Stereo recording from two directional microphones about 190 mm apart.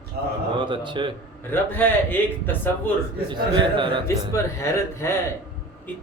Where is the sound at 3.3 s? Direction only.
25° right (ahead or behind).